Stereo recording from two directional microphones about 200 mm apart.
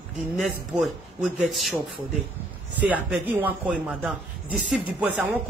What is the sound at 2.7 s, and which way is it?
A woman's voice, 10° right (ahead or behind).